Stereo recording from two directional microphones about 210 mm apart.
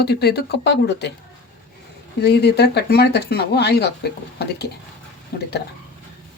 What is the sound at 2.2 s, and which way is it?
Speech, 50° left (ahead or behind).